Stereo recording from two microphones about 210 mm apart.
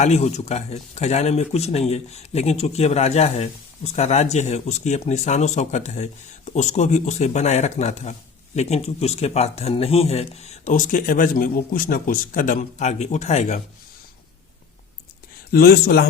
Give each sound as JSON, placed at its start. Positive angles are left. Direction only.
{"t": 0.0, "sound": "speech", "side_deg": 30}
{"t": 15.5, "sound": "a man's voice", "side_deg": 45}